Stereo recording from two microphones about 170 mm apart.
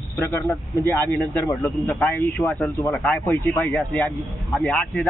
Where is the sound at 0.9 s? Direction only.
10° left (ahead or behind).